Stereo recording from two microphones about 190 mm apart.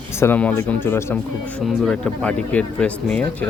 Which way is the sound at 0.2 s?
10° left (ahead or behind).